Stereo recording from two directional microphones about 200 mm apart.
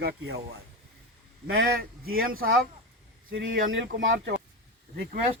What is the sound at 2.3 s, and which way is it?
Speech, 45° right (ahead or behind).